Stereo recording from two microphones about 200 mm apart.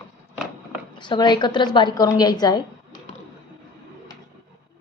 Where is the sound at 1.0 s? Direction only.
20° left (ahead or behind).